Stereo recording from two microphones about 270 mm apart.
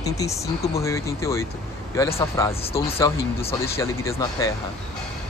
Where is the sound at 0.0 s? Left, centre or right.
Centre.